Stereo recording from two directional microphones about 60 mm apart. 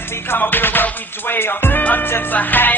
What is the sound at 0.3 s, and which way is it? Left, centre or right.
Music, left.